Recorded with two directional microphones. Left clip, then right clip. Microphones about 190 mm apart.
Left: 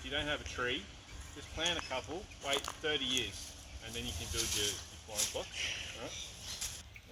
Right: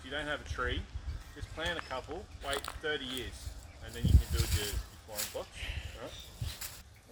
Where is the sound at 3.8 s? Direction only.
10° right (ahead or behind).